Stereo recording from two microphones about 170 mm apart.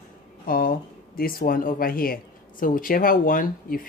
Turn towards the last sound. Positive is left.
turn(degrees=55)  # may be behind; listen again after turning